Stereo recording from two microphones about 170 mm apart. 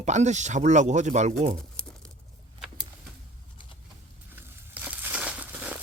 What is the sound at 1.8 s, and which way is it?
Crumpling, 5° left (ahead or behind).